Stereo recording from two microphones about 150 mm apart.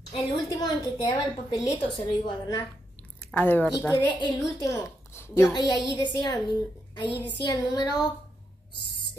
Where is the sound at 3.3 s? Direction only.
10° left (ahead or behind).